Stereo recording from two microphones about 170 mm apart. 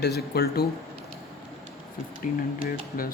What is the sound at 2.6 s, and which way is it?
Speech, 55° left (ahead or behind).